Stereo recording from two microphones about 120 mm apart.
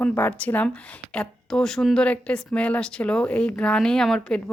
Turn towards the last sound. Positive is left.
turn(degrees=5)  # may be behind; listen again after turning